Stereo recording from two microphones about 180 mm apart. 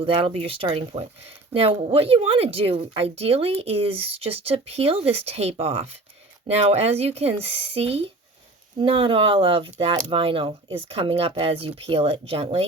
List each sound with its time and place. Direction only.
0.0 s speech: 30° right (ahead or behind)